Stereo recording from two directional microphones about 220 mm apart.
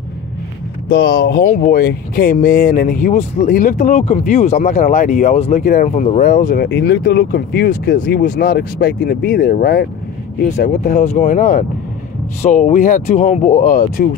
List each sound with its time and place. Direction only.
0.8 s speech: 45° left (ahead or behind)